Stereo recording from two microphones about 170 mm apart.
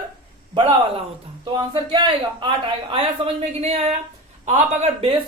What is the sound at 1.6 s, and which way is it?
Speech, 25° right (ahead or behind).